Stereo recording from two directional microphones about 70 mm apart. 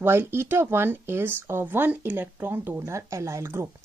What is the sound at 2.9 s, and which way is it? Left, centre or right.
Speech, right.